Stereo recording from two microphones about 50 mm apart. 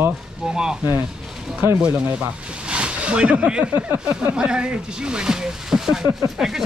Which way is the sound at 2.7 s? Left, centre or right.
Right.